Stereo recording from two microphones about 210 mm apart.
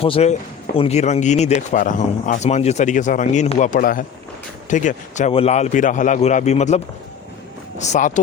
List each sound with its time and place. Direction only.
0.0 s speech: 30° left (ahead or behind)